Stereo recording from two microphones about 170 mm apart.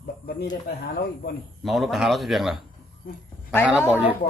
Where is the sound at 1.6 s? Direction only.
Centre (ahead or behind).